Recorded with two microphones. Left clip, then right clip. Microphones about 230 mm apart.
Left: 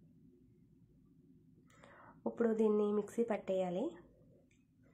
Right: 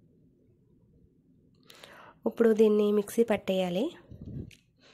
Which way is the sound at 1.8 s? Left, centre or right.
Right.